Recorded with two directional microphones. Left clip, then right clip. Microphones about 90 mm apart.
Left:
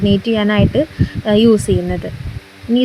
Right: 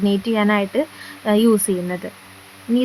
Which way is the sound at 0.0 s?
10° left (ahead or behind).